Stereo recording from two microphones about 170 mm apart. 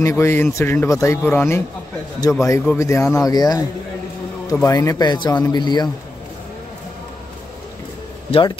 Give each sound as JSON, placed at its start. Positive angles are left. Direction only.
{"t": 0.0, "sound": "speech", "side_deg": 15}
{"t": 8.3, "sound": "speech", "side_deg": 30}